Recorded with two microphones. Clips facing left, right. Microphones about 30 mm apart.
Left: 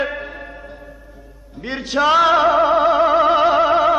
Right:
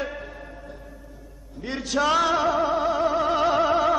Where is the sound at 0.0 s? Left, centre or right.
Left.